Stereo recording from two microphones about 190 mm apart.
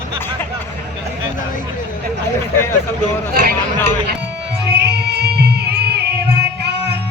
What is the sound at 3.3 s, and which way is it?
Speech, 55° right (ahead or behind).